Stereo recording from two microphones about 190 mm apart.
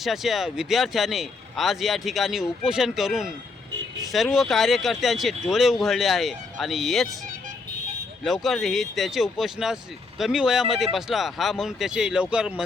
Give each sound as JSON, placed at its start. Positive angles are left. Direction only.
{"t": 0.0, "sound": "a man's voice", "side_deg": 0}
{"t": 8.2, "sound": "a man's voice", "side_deg": 0}